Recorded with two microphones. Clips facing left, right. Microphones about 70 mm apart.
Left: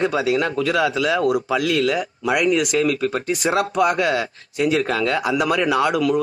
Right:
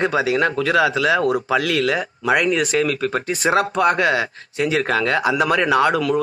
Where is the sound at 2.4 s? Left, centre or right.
Centre.